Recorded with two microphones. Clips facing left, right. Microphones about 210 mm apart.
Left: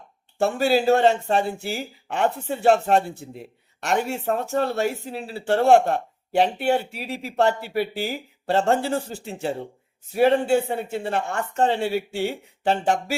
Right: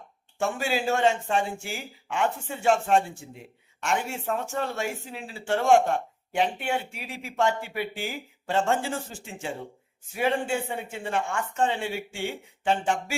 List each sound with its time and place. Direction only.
0.3 s speech: 35° left (ahead or behind)